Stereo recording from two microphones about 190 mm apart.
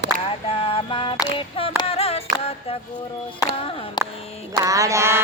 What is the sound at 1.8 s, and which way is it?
Music, 30° left (ahead or behind).